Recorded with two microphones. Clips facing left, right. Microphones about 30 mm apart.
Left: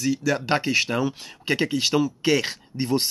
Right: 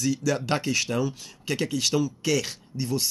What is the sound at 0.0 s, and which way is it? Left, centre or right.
Speech, left.